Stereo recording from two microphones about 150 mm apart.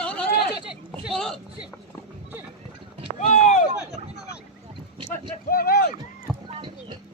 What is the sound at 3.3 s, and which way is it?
Chop, 55° left (ahead or behind).